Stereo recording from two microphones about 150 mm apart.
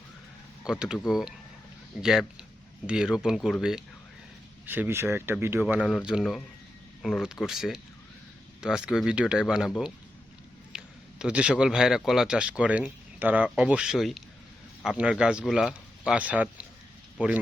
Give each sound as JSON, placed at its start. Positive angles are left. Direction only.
{"t": 0.6, "sound": "a man's voice", "side_deg": -5}